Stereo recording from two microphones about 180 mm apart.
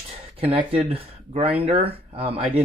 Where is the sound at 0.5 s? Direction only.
30° right (ahead or behind).